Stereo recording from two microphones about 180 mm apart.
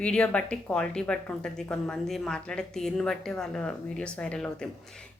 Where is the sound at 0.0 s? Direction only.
5° left (ahead or behind).